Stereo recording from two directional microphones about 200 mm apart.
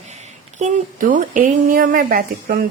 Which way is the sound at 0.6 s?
40° right (ahead or behind).